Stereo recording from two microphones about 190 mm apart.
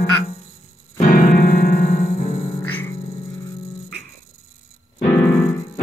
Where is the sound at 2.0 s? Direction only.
35° left (ahead or behind).